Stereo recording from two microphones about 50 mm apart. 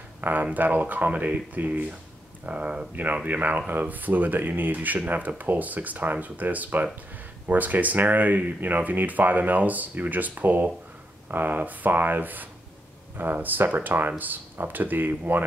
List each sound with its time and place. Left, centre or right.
0.2 s speech: right
2.9 s speech: right